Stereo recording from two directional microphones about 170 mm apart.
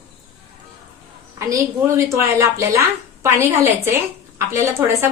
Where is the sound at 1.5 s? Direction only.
15° right (ahead or behind).